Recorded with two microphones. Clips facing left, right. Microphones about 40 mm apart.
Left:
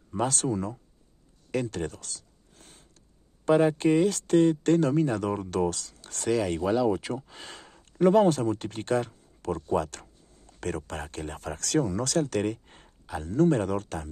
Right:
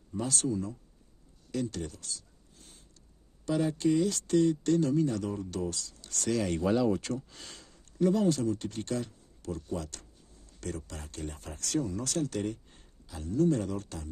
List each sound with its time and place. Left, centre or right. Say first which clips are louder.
0.1 s speech: left 4 dB; left
1.5 s a sound: left 4 dB; left
3.4 s speech: left 6 dB; left
5.9 s a sound: right 1 dB; left
6.2 s speech: left 3 dB; centre
7.2 s speech: left 3 dB; left
11.3 s speech: left 6 dB; left